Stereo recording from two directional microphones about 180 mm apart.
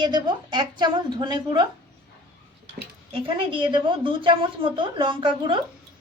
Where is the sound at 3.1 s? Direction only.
30° right (ahead or behind).